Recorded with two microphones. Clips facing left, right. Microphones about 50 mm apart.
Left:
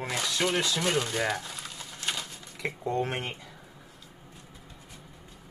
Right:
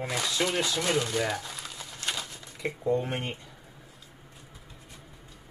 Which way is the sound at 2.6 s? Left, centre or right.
Left.